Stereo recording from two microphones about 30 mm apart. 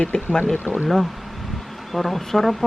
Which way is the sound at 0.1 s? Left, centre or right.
Left.